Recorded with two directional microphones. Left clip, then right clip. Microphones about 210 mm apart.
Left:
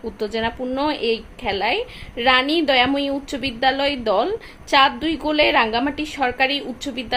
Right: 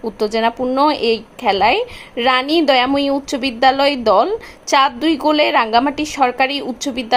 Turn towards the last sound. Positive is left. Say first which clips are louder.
# right 4 dB
turn(degrees=-25)  # may be behind; listen again after turning